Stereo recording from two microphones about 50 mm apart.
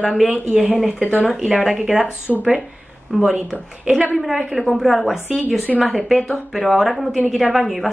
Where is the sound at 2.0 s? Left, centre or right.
Left.